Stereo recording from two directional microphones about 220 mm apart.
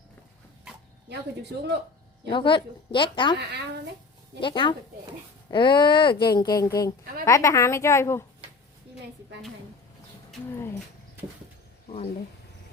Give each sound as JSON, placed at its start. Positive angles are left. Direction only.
{"t": 2.3, "sound": "speech", "side_deg": 20}
{"t": 3.3, "sound": "speech", "side_deg": -50}
{"t": 4.4, "sound": "a woman's voice", "side_deg": 20}